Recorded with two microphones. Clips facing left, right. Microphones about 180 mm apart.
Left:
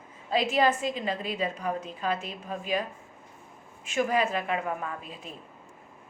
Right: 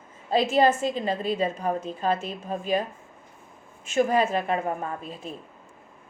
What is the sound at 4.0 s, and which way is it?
A woman's voice, 25° right (ahead or behind).